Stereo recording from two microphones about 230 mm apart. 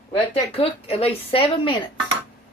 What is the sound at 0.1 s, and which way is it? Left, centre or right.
A woman's voice, left.